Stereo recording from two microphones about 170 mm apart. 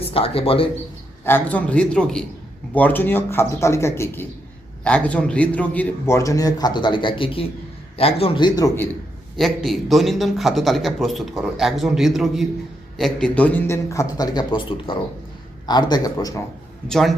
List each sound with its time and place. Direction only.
0.1 s speech: 35° left (ahead or behind)
1.2 s a man's voice: 10° left (ahead or behind)
9.4 s a man's voice: centre (ahead or behind); by 16.4 s 20° left (ahead or behind)
16.9 s a man's voice: centre (ahead or behind)